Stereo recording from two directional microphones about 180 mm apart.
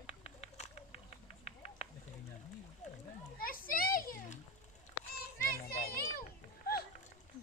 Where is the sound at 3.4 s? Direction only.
50° left (ahead or behind).